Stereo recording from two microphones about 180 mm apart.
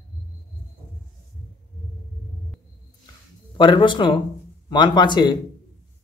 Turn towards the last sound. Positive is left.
turn(degrees=25)  # may be behind; listen again after turning